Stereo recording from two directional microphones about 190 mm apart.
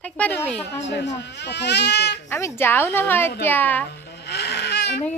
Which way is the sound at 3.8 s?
60° left (ahead or behind).